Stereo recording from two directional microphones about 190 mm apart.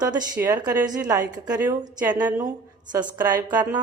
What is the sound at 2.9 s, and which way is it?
Speech, 20° right (ahead or behind).